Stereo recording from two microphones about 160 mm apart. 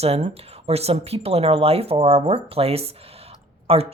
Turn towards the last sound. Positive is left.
turn(degrees=-40)  # may be behind; listen again after turning